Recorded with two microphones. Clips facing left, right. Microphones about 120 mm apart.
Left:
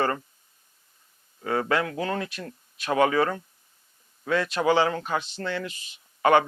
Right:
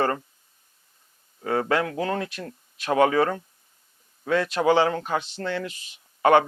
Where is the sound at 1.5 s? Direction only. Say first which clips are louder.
Right 2 dB; 40° right (ahead or behind).